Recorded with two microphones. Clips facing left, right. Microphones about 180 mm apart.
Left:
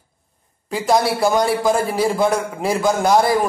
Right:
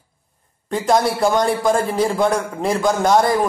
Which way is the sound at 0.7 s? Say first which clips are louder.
Even; 5° left (ahead or behind).